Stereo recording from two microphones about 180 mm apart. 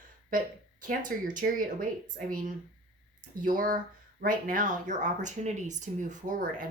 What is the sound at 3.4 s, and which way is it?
A woman's voice, 50° right (ahead or behind).